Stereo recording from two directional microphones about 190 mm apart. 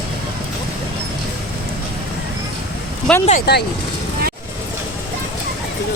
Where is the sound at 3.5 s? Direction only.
60° left (ahead or behind).